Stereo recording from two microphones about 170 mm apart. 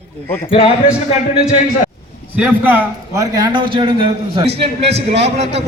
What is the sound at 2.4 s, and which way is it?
A man's voice, 10° right (ahead or behind).